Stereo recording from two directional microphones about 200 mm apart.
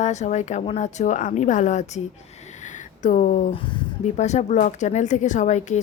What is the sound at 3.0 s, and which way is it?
Speech, 40° left (ahead or behind).